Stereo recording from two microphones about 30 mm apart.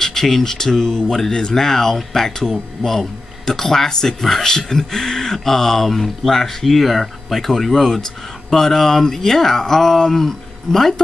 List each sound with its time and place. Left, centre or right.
0.0 s speech: centre